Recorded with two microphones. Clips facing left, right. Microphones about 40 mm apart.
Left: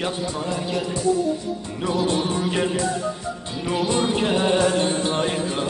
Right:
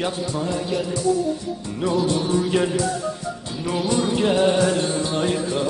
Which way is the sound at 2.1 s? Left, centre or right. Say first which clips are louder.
Right 2 dB; left.